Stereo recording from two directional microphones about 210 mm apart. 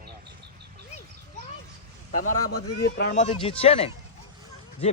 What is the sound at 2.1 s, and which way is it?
Speech, 35° left (ahead or behind).